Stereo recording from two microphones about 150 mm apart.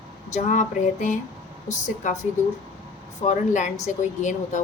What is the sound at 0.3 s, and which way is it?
A woman's voice, 55° left (ahead or behind).